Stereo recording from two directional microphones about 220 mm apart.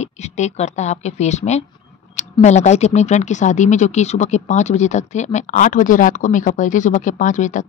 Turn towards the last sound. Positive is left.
turn(degrees=35)  # may be behind; listen again after turning